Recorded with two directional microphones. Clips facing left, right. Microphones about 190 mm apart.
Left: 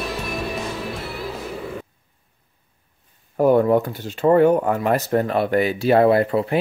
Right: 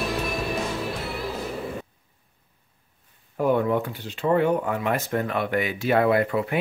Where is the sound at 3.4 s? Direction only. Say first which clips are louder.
Left 6 dB; 40° left (ahead or behind).